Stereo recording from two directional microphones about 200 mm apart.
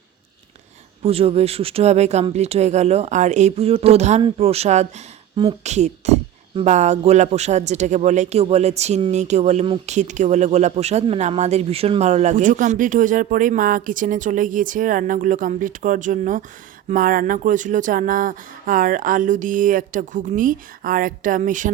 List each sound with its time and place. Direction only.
1.0 s speech: 30° right (ahead or behind)